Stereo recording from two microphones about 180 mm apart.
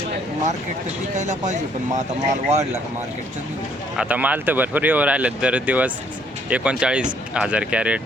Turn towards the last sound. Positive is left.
turn(degrees=-5)  # may be behind; listen again after turning